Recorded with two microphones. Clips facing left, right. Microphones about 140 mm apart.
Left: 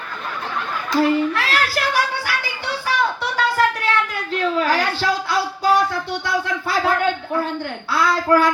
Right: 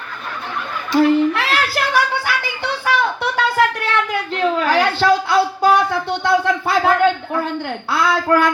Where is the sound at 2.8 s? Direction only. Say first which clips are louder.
Right 3 dB; 60° right (ahead or behind).